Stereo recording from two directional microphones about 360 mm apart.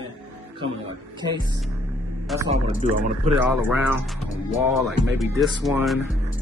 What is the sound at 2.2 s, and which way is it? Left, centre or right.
A man's voice, centre.